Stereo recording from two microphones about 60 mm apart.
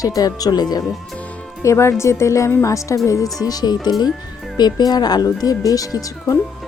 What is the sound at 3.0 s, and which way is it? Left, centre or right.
Speech, left.